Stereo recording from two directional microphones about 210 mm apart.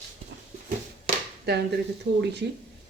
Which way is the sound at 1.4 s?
50° right (ahead or behind).